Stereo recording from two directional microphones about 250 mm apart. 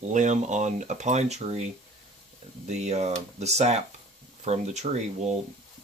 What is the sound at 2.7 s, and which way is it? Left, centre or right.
Speech, right.